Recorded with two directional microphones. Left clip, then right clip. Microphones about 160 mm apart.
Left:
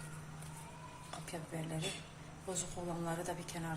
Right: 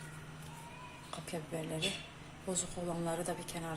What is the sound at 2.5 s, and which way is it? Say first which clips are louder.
A woman's voice: right 3 dB; 40° right (ahead or behind).